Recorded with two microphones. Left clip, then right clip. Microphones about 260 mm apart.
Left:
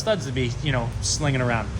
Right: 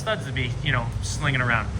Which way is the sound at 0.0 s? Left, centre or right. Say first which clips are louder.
Left 3 dB; left.